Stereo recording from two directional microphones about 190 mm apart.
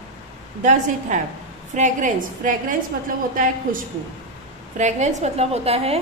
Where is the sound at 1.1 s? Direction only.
40° right (ahead or behind).